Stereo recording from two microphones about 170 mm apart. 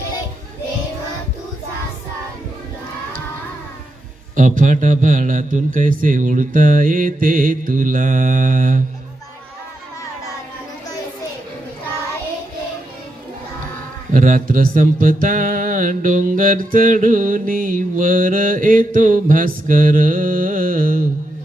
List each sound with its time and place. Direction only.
4.4 s mantra: 50° right (ahead or behind)
14.2 s mantra: 55° right (ahead or behind)